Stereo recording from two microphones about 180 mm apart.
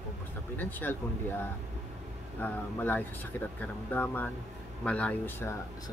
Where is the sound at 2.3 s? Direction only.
10° left (ahead or behind).